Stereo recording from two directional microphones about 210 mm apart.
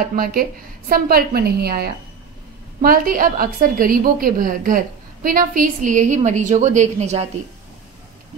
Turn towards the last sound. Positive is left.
turn(degrees=-30)  # may be behind; listen again after turning